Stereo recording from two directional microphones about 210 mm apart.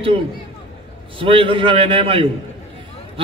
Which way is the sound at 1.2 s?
25° right (ahead or behind).